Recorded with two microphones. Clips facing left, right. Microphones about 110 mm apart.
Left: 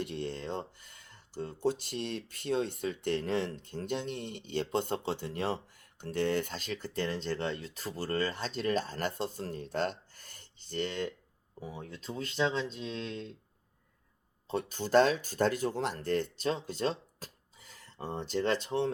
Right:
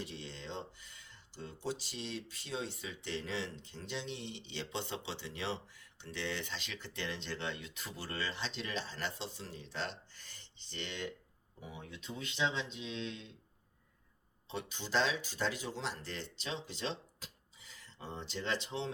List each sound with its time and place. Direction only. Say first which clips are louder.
0.0 s speech: left 9 dB; 55° left (ahead or behind)
14.4 s speech: left 8 dB; 45° left (ahead or behind)